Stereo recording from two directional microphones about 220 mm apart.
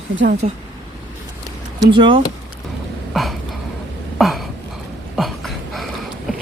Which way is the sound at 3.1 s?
Centre (ahead or behind).